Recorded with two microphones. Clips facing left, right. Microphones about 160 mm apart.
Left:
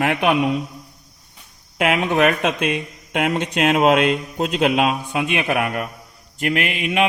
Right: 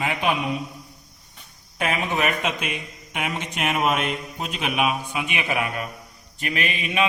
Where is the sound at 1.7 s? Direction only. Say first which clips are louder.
Left 7 dB; 75° left (ahead or behind).